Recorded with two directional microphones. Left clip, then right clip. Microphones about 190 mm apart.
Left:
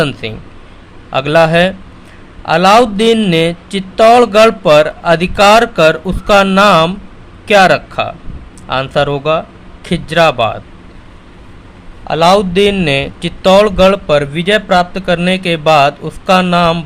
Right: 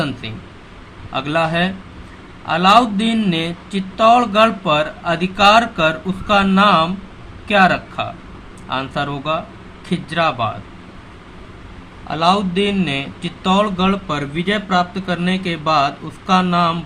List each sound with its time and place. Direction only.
0.0 s speech: 50° left (ahead or behind)
12.0 s speech: 55° left (ahead or behind)